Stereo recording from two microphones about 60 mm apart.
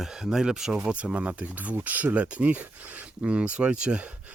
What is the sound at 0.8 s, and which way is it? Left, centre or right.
Speech, right.